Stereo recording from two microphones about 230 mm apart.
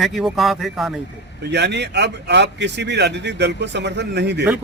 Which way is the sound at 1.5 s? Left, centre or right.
Right.